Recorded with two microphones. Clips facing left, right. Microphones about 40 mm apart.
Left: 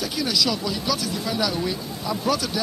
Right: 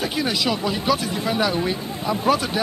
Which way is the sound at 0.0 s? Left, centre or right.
Right.